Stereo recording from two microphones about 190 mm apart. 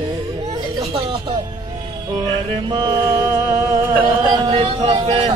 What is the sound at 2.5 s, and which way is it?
Mantra, 25° right (ahead or behind).